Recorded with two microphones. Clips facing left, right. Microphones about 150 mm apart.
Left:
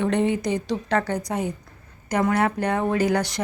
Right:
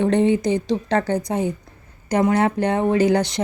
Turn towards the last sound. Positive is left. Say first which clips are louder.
# right 4 dB
turn(degrees=-25)  # may be behind; listen again after turning